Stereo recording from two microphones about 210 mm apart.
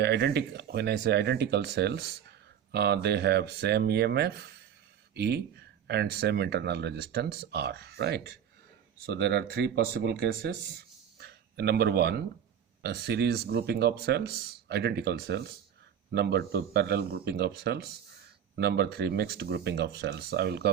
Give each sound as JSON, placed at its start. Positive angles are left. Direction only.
{"t": 0.0, "sound": "speech", "side_deg": -55}